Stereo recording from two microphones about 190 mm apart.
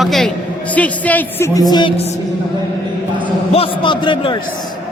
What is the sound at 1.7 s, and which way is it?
Speech, 25° left (ahead or behind).